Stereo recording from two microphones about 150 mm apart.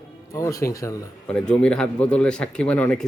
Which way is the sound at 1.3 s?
5° left (ahead or behind).